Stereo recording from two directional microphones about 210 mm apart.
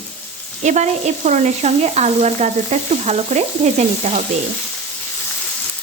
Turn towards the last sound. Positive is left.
turn(degrees=-30)  # may be behind; listen again after turning